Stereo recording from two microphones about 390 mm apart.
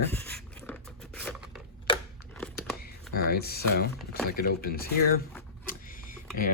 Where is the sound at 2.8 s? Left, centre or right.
Left.